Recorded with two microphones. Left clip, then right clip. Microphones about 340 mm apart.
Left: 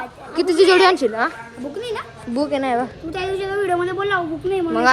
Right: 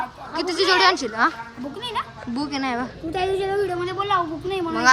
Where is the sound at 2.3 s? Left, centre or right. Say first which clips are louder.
Left 6 dB; centre.